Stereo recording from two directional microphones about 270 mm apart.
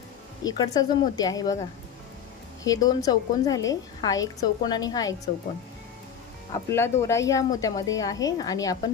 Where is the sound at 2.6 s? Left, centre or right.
Centre.